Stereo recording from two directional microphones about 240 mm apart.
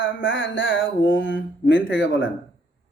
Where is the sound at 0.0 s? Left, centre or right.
Left.